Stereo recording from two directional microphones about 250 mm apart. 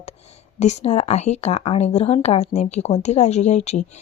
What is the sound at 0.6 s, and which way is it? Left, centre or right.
A woman's voice, left.